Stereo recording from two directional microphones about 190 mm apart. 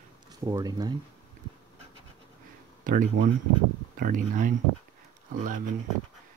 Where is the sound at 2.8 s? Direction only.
45° right (ahead or behind).